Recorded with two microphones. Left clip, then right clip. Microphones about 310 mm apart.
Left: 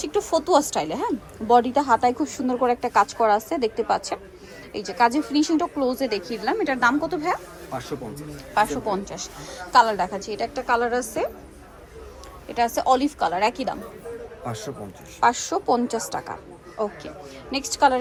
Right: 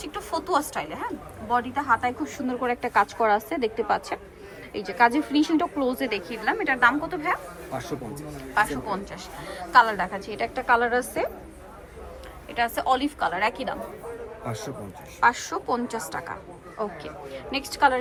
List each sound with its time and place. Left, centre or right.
0.0 s a woman's voice: centre
7.7 s a man's voice: centre
8.9 s a woman's voice: centre
12.5 s a woman's voice: centre
14.4 s a man's voice: centre
15.2 s a woman's voice: centre